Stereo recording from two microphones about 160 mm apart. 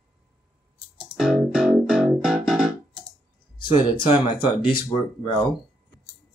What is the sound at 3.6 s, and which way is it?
Speech, 30° left (ahead or behind).